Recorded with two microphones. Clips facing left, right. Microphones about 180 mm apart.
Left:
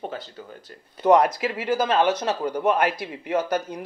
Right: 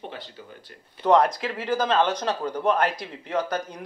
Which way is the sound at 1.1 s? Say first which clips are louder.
Left 2 dB; 10° left (ahead or behind).